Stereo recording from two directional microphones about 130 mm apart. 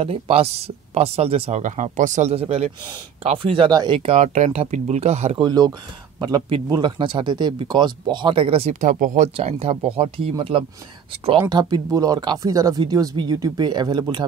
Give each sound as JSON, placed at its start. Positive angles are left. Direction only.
{"t": 0.0, "sound": "speech", "side_deg": -50}
{"t": 1.6, "sound": "speech", "side_deg": -75}
{"t": 4.0, "sound": "speech", "side_deg": -65}
{"t": 5.4, "sound": "speech", "side_deg": -30}
{"t": 8.8, "sound": "speech", "side_deg": -70}